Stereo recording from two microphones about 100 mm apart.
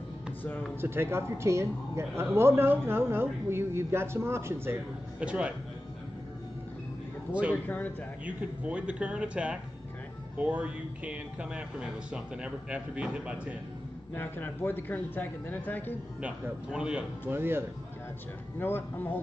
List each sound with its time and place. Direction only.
0.7 s speech: 25° right (ahead or behind)
5.2 s speech: 10° right (ahead or behind)
7.6 s a man's voice: 15° left (ahead or behind)
8.3 s speech: 10° right (ahead or behind)
14.1 s speech: 20° left (ahead or behind)
16.2 s speech: 10° right (ahead or behind)
17.3 s speech: 20° right (ahead or behind)
18.6 s speech: 20° left (ahead or behind)